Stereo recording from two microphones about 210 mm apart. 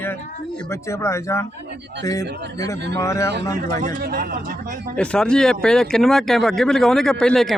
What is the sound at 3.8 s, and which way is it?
Speech, 40° right (ahead or behind).